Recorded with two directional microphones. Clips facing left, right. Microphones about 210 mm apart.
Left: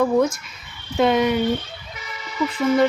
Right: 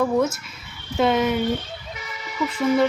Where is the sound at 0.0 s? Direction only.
5° right (ahead or behind).